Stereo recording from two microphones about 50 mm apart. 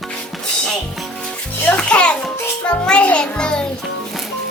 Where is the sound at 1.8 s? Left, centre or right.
Left.